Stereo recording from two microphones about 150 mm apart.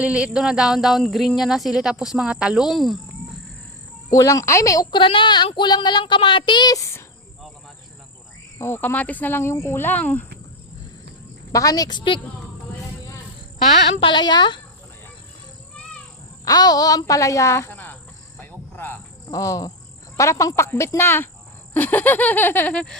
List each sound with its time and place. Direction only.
0.0 s speech: 5° right (ahead or behind)
4.1 s speech: 20° left (ahead or behind)
8.5 s speech: 15° left (ahead or behind)
11.5 s speech: 25° left (ahead or behind)
13.7 s speech: 45° left (ahead or behind)
14.1 s speech: 30° left (ahead or behind)
16.5 s speech: 25° left (ahead or behind)
18.3 s cricket: 15° left (ahead or behind)
20.1 s speech: 20° left (ahead or behind)